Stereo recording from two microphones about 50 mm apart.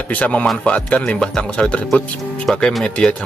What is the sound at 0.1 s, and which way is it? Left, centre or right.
A man's voice, left.